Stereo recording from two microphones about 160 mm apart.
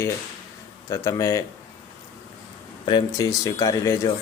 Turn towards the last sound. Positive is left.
turn(degrees=20)  # may be behind; listen again after turning